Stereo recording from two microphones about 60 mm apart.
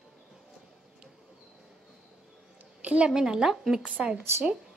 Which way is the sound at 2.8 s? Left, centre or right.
Centre.